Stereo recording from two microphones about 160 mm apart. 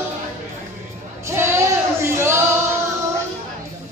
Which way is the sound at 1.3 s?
15° right (ahead or behind).